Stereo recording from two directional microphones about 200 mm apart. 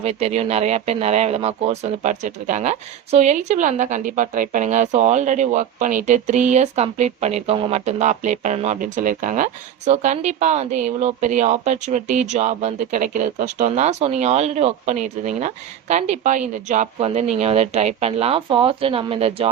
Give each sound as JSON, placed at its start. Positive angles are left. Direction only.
{"t": 0.0, "sound": "speech", "side_deg": -30}